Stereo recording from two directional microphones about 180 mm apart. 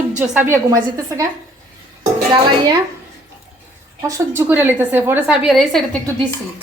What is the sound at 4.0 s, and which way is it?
A woman's voice, 15° right (ahead or behind).